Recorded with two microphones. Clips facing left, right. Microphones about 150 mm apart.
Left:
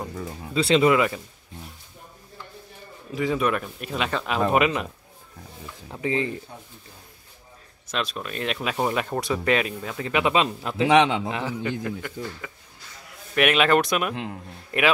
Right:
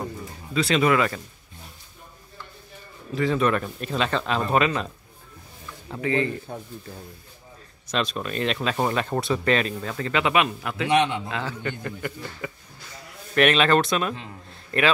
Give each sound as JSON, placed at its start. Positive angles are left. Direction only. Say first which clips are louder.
{"t": 0.6, "sound": "speech", "louder": "left 2 dB", "side_deg": 25}
{"t": 3.2, "sound": "speech", "louder": "right 2 dB", "side_deg": 10}
{"t": 5.9, "sound": "speech", "louder": "right 2 dB", "side_deg": 20}
{"t": 7.9, "sound": "speech", "louder": "right 3 dB", "side_deg": 5}
{"t": 10.9, "sound": "a man's voice", "louder": "left 3 dB", "side_deg": 90}
{"t": 11.2, "sound": "speech", "louder": "left 2 dB", "side_deg": 20}
{"t": 11.8, "sound": "speech", "louder": "left 2 dB", "side_deg": 0}
{"t": 13.3, "sound": "speech", "louder": "right 1 dB", "side_deg": 10}